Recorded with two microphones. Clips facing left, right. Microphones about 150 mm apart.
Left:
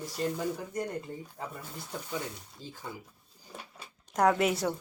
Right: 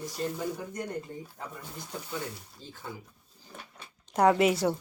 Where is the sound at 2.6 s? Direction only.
40° left (ahead or behind).